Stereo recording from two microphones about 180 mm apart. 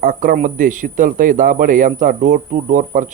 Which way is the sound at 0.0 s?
55° right (ahead or behind).